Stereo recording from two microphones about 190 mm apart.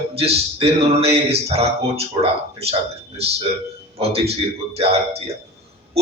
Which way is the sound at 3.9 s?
30° right (ahead or behind).